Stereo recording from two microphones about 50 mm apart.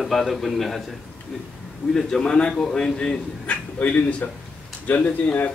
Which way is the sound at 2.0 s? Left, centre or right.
Centre.